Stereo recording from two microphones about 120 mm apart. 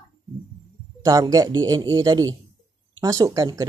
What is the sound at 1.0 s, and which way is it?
Speech, 30° right (ahead or behind).